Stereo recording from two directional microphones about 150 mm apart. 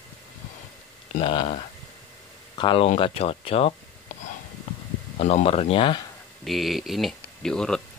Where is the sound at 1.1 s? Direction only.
35° left (ahead or behind).